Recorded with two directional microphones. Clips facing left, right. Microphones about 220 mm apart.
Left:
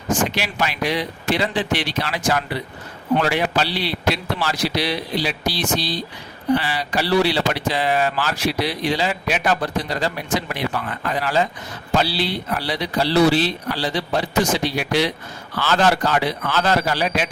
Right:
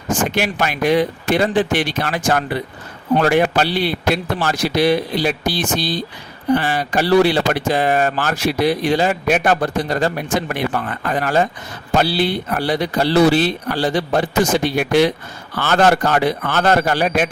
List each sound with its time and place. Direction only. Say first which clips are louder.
0.3 s speech: right 5 dB; 50° right (ahead or behind)